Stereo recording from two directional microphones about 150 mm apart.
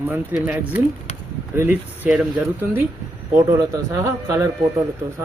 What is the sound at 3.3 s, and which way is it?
A man's voice, 20° right (ahead or behind).